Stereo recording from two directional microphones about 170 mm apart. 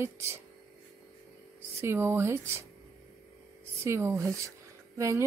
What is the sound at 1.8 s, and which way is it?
Speech, 15° right (ahead or behind).